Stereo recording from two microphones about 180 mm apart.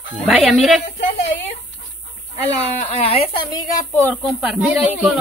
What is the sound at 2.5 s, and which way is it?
Speech, 35° left (ahead or behind).